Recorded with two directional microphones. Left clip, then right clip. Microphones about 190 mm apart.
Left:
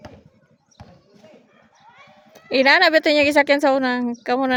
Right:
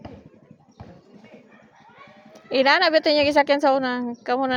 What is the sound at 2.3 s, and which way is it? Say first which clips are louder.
A woman's voice: left 3 dB; 35° left (ahead or behind).